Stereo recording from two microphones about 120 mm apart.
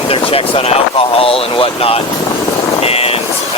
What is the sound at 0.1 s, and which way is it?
Speech, 50° left (ahead or behind).